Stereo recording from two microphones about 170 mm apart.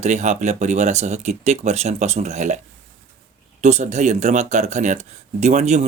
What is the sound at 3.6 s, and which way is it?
Speech, 45° right (ahead or behind).